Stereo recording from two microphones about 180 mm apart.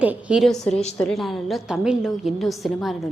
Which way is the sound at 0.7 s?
35° left (ahead or behind).